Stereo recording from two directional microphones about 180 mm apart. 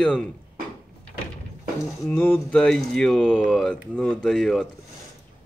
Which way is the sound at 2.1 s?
10° left (ahead or behind).